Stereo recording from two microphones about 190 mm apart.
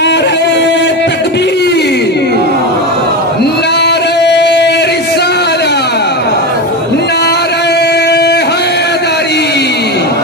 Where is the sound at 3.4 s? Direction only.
60° left (ahead or behind).